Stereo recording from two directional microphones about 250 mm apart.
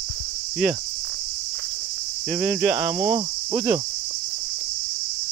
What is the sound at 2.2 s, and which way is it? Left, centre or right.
Cricket, centre.